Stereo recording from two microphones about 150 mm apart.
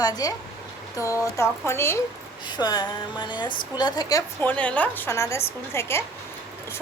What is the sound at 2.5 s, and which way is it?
A woman's voice, 30° left (ahead or behind).